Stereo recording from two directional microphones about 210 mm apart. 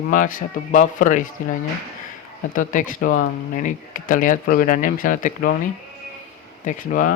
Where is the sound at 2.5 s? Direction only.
40° left (ahead or behind).